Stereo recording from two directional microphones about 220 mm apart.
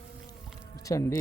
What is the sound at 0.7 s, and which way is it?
Music, 15° left (ahead or behind).